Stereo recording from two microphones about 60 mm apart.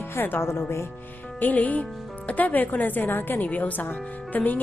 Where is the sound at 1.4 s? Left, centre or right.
Left.